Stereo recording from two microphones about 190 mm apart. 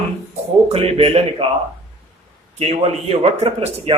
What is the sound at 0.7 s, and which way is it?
Speech, 30° right (ahead or behind).